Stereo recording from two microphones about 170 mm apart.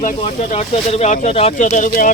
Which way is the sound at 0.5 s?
40° left (ahead or behind).